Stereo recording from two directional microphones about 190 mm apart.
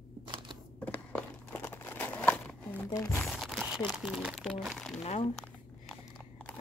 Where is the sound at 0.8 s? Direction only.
10° left (ahead or behind).